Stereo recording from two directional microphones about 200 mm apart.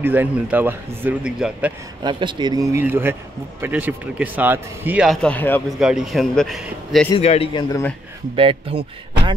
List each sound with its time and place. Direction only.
0.0 s speech: 10° right (ahead or behind)
2.0 s speech: 25° right (ahead or behind); by 5.8 s 10° left (ahead or behind)
5.8 s a man's voice: centre (ahead or behind)
7.1 s a man's voice: 30° left (ahead or behind)
8.4 s speech: 25° right (ahead or behind)